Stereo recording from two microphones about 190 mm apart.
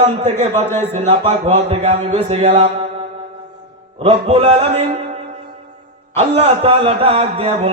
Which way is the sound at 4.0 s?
30° right (ahead or behind).